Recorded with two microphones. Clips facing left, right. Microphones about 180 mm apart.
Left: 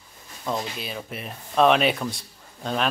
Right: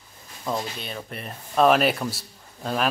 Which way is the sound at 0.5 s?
Centre (ahead or behind).